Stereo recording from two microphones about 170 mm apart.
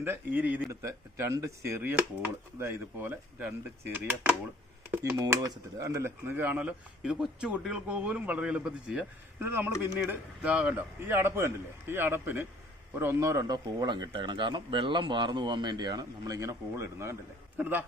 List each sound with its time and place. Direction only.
0.0 s speech: 10° right (ahead or behind)